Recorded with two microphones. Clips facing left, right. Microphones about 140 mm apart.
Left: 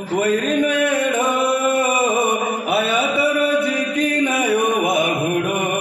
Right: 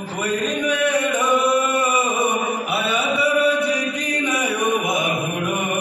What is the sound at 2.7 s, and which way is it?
Mantra, 55° left (ahead or behind).